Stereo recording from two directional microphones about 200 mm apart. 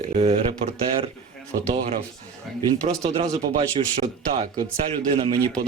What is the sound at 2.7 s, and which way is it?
A man's voice, 30° right (ahead or behind).